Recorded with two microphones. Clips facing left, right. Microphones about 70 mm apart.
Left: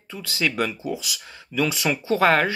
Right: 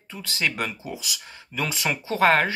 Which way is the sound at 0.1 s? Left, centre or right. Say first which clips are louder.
Left 2 dB; right.